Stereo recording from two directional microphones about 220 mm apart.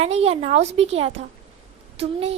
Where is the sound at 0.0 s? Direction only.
30° right (ahead or behind).